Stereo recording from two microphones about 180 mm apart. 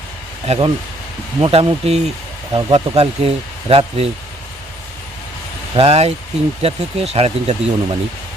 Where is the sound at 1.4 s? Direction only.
30° right (ahead or behind).